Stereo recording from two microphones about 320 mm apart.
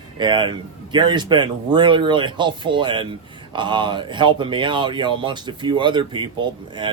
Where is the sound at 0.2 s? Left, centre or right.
Centre.